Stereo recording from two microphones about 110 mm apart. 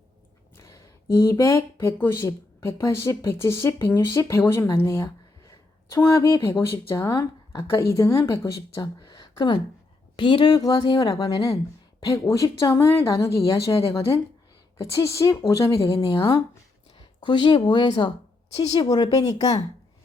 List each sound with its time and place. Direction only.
0.5 s speech: 30° left (ahead or behind)
16.0 s speech: 45° left (ahead or behind)
18.5 s speech: 70° left (ahead or behind)
19.1 s speech: 35° left (ahead or behind)